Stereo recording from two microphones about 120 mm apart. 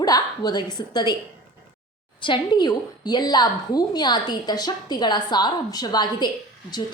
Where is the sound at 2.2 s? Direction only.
40° left (ahead or behind).